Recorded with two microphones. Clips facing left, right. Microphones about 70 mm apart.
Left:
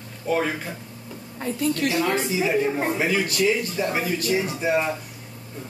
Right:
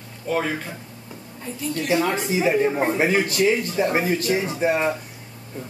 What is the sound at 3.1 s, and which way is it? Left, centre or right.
Speech, right.